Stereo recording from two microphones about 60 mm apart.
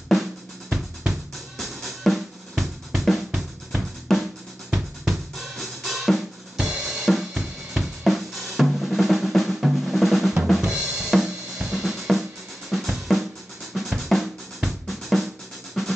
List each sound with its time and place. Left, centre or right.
1.6 s drum: centre
7.1 s drum kit: centre
8.0 s drum: centre
10.7 s drum: centre
11.1 s drum kit: centre
13.7 s drum: centre
15.8 s music: centre